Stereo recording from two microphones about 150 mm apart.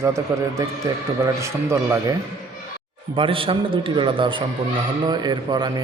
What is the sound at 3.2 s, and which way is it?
A man's voice, 35° right (ahead or behind).